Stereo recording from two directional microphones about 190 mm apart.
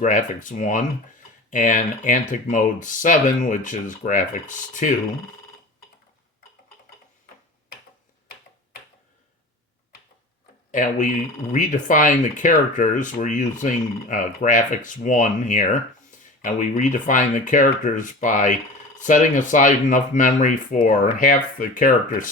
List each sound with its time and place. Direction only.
0.0 s speech: 40° left (ahead or behind)
10.7 s speech: 40° left (ahead or behind)